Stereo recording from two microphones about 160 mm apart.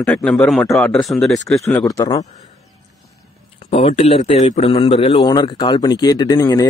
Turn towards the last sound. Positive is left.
turn(degrees=25)  # may be behind; listen again after turning